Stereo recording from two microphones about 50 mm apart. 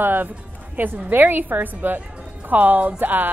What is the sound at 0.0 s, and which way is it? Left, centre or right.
Speech, right.